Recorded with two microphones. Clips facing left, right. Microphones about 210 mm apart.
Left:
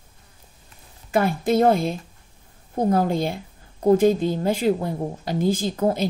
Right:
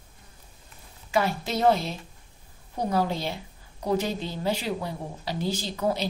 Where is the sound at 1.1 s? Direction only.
50° left (ahead or behind).